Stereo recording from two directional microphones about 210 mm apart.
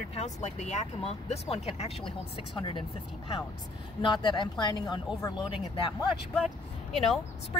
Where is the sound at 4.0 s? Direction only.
25° left (ahead or behind).